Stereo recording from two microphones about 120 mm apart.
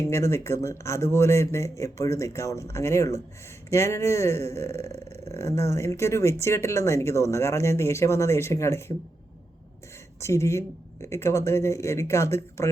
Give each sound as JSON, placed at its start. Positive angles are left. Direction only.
{"t": 0.0, "sound": "speech", "side_deg": 25}
{"t": 10.2, "sound": "speech", "side_deg": 25}